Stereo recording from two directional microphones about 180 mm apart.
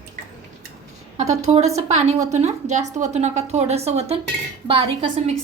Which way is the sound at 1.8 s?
40° right (ahead or behind).